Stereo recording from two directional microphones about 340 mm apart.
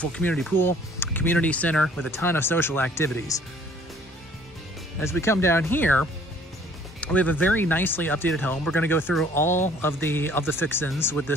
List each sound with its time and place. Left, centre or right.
0.0 s speech: centre
5.0 s speech: centre